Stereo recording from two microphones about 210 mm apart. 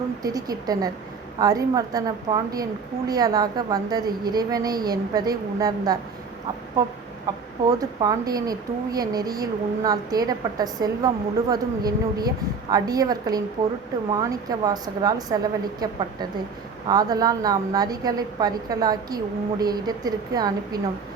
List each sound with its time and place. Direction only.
0.2 s a woman's voice: 15° right (ahead or behind)
7.3 s speech: 15° right (ahead or behind)
16.9 s a woman's voice: 20° right (ahead or behind)